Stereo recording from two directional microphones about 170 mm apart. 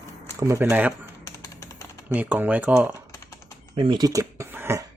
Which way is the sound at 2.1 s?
10° right (ahead or behind).